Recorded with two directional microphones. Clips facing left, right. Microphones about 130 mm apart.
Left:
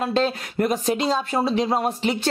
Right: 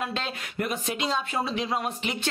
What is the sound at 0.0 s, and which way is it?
Speech, 35° left (ahead or behind).